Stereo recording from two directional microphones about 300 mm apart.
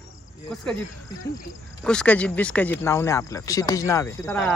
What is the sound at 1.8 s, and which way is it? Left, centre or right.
Speech, centre.